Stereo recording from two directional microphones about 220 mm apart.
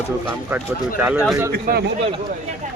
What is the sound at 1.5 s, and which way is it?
Speech, 45° right (ahead or behind).